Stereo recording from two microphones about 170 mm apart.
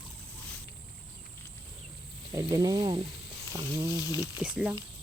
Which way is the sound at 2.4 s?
20° right (ahead or behind).